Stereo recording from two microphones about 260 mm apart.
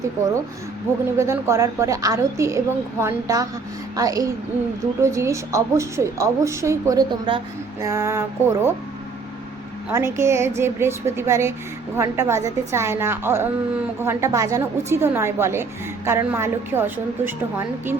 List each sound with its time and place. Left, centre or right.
1.2 s a woman's voice: centre
9.9 s a woman's voice: centre